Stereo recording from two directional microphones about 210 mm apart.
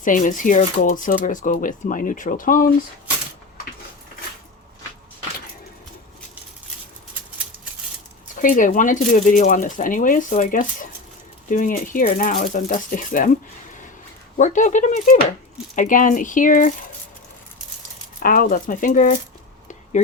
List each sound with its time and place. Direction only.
0.0 s speech: 40° left (ahead or behind)
8.4 s speech: 40° left (ahead or behind)
14.3 s speech: 35° left (ahead or behind)
18.2 s speech: 40° left (ahead or behind)